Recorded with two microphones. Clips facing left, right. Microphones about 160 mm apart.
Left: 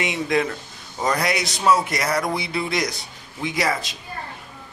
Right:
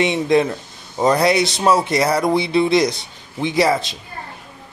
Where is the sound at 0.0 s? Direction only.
30° right (ahead or behind).